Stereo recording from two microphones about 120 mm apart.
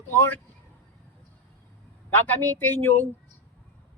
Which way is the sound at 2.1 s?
15° left (ahead or behind).